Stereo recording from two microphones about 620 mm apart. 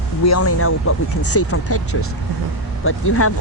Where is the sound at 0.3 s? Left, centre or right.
Left.